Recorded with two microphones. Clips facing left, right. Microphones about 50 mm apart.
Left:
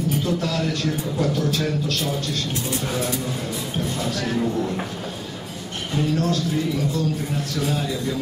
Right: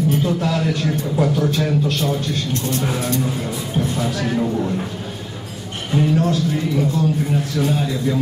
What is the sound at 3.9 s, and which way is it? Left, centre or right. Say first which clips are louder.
Speech: right 1 dB; centre.